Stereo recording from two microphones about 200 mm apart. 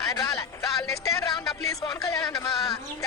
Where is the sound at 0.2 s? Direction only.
15° left (ahead or behind).